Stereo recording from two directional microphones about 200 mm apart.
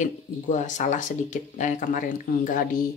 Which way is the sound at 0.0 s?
40° left (ahead or behind).